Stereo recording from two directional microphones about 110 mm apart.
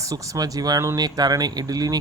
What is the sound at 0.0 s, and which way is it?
Speech, 30° right (ahead or behind).